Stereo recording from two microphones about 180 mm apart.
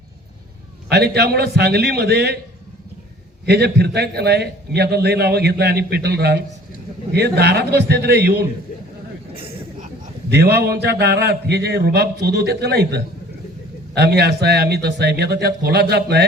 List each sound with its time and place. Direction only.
0.9 s a man's voice: 65° right (ahead or behind)
3.4 s a man's voice: 65° right (ahead or behind)
10.3 s a man's voice: 65° right (ahead or behind)